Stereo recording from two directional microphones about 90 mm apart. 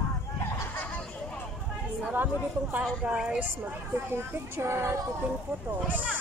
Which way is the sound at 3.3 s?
25° right (ahead or behind).